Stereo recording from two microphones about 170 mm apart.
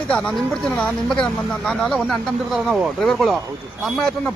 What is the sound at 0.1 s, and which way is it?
A man's voice, 5° left (ahead or behind).